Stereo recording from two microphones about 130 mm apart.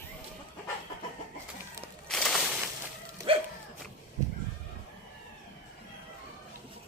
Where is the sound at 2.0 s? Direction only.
5° left (ahead or behind).